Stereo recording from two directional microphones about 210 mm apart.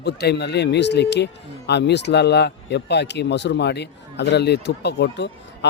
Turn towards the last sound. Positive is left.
turn(degrees=55)  # may be behind; listen again after turning